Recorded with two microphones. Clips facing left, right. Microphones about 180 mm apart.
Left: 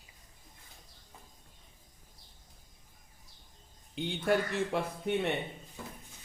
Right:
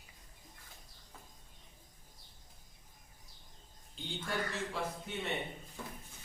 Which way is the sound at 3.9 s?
65° left (ahead or behind).